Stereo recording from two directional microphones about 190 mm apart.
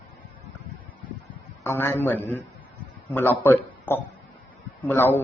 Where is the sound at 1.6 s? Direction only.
10° left (ahead or behind).